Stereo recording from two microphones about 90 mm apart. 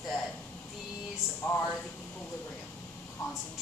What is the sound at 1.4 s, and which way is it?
Speech, 25° left (ahead or behind).